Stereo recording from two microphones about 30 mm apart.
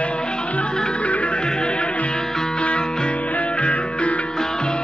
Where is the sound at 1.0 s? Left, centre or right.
Left.